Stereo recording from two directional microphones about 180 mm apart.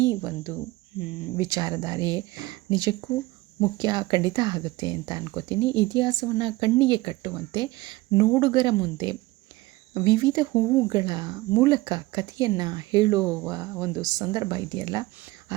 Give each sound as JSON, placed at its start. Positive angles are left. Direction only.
{"t": 0.0, "sound": "speech", "side_deg": -15}